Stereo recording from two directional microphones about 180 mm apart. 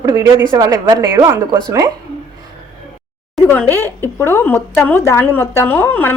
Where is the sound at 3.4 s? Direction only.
10° left (ahead or behind).